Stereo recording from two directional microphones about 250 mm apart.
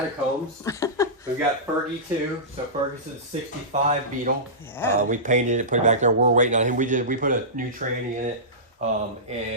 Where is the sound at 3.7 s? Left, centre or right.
Right.